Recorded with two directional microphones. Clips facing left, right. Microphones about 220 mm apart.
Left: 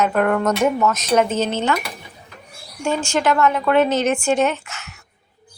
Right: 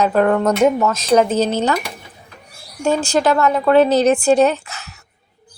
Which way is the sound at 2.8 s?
35° right (ahead or behind).